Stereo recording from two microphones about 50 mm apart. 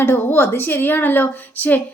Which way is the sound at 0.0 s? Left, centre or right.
Left.